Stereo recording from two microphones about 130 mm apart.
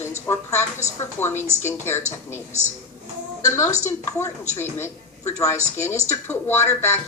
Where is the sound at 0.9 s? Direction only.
20° left (ahead or behind).